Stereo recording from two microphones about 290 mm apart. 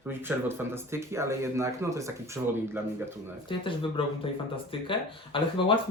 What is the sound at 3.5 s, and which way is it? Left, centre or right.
Speech, centre.